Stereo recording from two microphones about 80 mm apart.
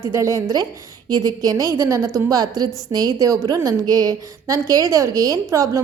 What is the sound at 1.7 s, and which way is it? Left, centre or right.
A woman's voice, right.